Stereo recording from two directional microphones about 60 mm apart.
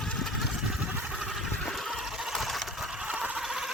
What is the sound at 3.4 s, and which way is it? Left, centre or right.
Engine, centre.